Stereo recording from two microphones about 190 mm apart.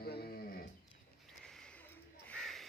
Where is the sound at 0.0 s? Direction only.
55° left (ahead or behind).